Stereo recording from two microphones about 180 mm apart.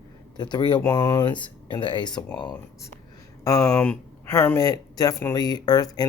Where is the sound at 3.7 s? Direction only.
10° left (ahead or behind).